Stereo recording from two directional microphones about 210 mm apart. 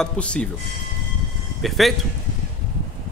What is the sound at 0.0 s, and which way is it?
Speech, 5° left (ahead or behind).